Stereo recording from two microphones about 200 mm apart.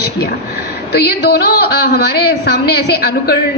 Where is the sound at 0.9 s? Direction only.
55° left (ahead or behind).